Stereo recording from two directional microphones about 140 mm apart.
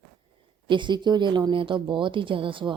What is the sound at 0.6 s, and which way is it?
Speech, 35° right (ahead or behind).